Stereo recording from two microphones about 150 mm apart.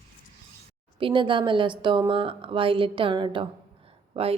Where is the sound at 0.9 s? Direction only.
35° right (ahead or behind).